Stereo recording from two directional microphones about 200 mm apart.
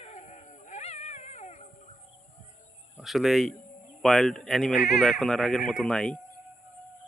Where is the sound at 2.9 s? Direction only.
Centre (ahead or behind).